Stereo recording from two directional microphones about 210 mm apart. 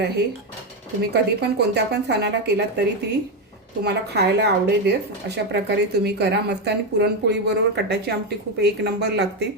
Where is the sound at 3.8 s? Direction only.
50° right (ahead or behind).